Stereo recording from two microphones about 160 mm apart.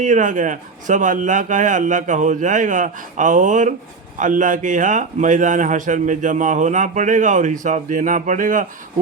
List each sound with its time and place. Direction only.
0.0 s a man's voice: 50° right (ahead or behind)